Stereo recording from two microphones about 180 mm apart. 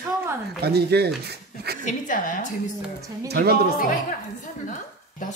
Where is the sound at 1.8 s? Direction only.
45° left (ahead or behind).